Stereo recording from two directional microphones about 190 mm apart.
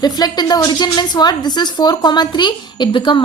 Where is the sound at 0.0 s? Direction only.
20° left (ahead or behind).